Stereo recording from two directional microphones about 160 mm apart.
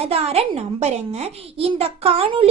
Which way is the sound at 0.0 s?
40° right (ahead or behind).